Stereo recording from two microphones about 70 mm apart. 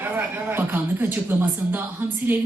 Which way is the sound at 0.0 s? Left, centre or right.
Right.